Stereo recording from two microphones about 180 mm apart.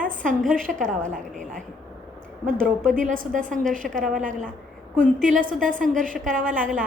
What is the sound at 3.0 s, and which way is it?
A woman's voice, 50° right (ahead or behind).